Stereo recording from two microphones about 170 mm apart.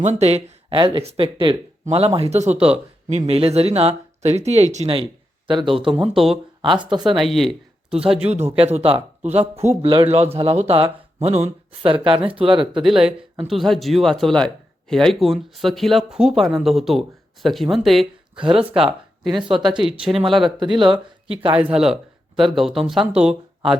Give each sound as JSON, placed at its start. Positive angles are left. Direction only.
{"t": 0.0, "sound": "speech", "side_deg": -40}
{"t": 2.6, "sound": "speech", "side_deg": -5}
{"t": 3.1, "sound": "speech", "side_deg": -40}
{"t": 7.2, "sound": "speech", "side_deg": 0}
{"t": 8.0, "sound": "speech", "side_deg": -35}
{"t": 13.5, "sound": "speech", "side_deg": 0}
{"t": 18.3, "sound": "speech", "side_deg": -30}
{"t": 18.8, "sound": "speech", "side_deg": 0}
{"t": 19.4, "sound": "speech", "side_deg": -30}
{"t": 19.8, "sound": "speech", "side_deg": -5}
{"t": 20.7, "sound": "speech", "side_deg": -30}
{"t": 22.4, "sound": "speech", "side_deg": 0}